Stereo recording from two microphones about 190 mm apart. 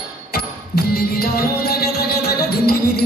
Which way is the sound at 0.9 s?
55° left (ahead or behind).